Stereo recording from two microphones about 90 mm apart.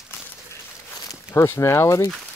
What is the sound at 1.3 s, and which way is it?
Speech, 30° left (ahead or behind).